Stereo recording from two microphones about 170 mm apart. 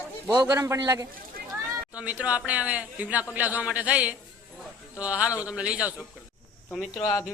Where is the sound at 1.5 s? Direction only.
5° right (ahead or behind).